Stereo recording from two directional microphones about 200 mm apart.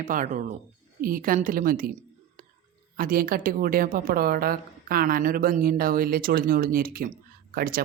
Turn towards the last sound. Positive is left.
turn(degrees=-45)  # may be behind; listen again after turning